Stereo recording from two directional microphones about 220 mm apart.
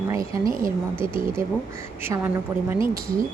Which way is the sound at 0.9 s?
10° right (ahead or behind).